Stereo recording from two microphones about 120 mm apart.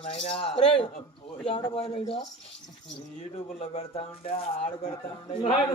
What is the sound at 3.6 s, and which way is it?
Speech, 55° left (ahead or behind).